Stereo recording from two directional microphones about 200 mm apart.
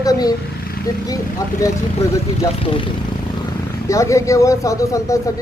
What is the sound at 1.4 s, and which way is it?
Speech, 15° left (ahead or behind).